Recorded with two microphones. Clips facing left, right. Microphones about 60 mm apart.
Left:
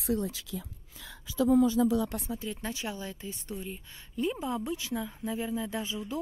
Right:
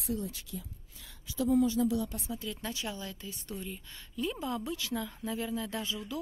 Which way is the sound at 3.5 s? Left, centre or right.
Centre.